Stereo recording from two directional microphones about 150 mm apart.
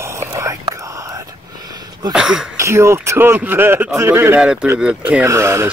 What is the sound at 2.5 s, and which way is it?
A man's voice, 20° right (ahead or behind).